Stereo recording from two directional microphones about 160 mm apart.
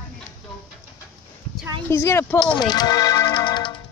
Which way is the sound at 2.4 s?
30° left (ahead or behind).